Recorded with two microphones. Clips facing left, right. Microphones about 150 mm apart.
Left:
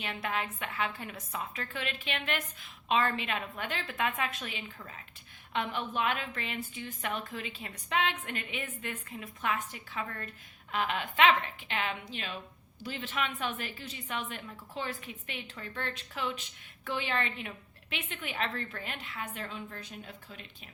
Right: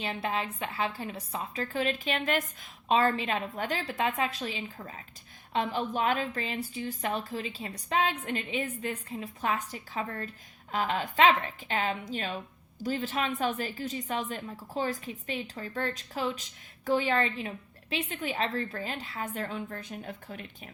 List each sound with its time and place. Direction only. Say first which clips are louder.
0.0 s a woman's voice: right 3 dB; 30° right (ahead or behind); by 20.4 s 50° right (ahead or behind)